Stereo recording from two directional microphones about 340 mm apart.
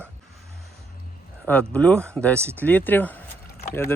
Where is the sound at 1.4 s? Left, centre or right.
Centre.